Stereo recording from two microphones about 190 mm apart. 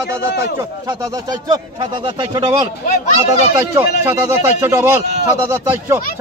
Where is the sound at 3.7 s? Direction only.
15° right (ahead or behind).